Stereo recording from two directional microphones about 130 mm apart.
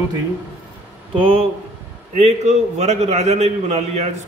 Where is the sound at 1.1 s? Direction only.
45° right (ahead or behind).